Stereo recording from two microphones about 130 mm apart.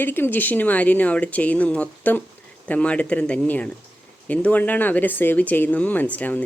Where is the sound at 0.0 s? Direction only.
15° left (ahead or behind).